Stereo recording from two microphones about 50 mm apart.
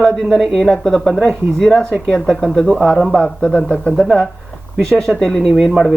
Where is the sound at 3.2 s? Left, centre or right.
Centre.